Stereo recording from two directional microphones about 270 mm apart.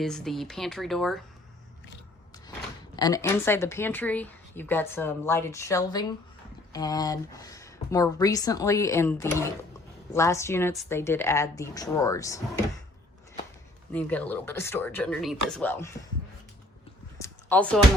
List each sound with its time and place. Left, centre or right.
0.0 s speech: centre
2.9 s speech: centre
13.9 s speech: centre
17.2 s a sound: centre